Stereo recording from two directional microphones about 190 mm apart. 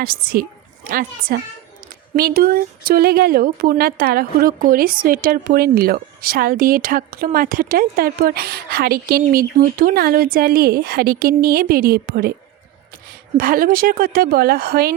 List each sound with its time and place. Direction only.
0.0 s speech: 50° right (ahead or behind)
13.3 s speech: 50° right (ahead or behind)